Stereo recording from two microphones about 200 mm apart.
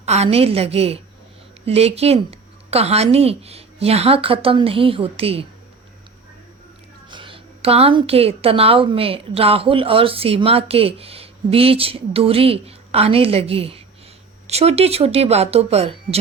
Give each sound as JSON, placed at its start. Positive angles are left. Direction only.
{"t": 0.0, "sound": "a woman's voice", "side_deg": -35}
{"t": 7.1, "sound": "a woman's voice", "side_deg": -25}